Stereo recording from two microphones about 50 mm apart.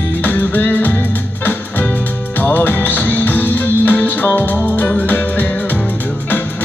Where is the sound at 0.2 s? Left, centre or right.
Left.